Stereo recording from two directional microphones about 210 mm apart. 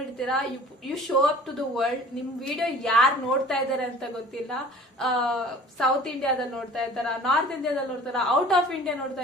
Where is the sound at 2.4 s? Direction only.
Centre (ahead or behind).